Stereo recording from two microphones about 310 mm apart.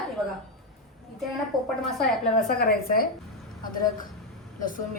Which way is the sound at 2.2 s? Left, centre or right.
Left.